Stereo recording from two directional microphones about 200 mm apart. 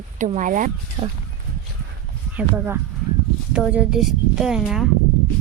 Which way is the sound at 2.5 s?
10° right (ahead or behind).